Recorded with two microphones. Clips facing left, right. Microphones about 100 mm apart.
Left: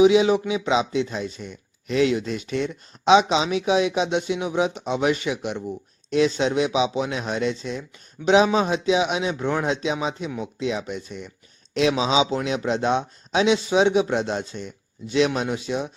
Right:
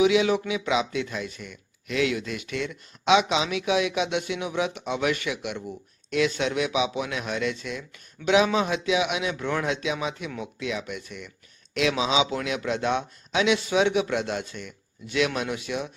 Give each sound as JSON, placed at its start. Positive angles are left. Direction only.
{"t": 0.0, "sound": "speech", "side_deg": 25}